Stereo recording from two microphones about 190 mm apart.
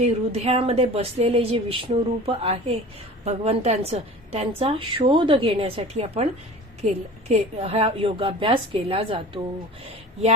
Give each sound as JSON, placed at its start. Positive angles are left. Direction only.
{"t": 0.0, "sound": "a woman's voice", "side_deg": -35}